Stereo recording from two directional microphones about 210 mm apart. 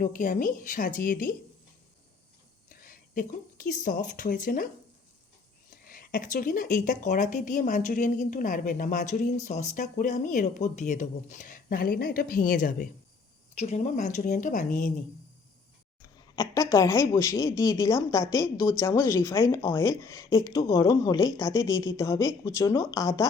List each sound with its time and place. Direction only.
0.0 s speech: 40° left (ahead or behind)
2.6 s speech: 40° left (ahead or behind)
5.7 s speech: 40° left (ahead or behind)
16.3 s speech: 15° left (ahead or behind)